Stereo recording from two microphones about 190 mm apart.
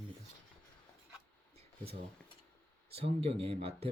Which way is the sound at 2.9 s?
30° right (ahead or behind).